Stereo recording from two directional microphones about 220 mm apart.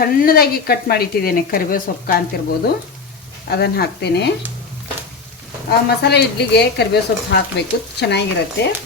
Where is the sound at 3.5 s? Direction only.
45° left (ahead or behind).